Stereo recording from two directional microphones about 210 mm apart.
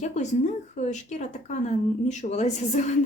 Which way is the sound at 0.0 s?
35° left (ahead or behind).